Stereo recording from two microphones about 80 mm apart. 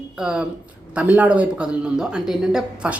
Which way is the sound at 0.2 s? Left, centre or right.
Centre.